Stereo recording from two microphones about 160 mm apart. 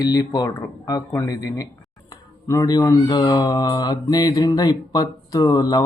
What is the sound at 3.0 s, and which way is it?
Speech, 25° left (ahead or behind).